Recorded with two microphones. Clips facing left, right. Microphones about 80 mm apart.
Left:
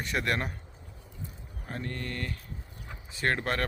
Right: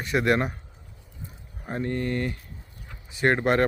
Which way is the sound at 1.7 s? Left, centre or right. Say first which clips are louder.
Right 9 dB; right.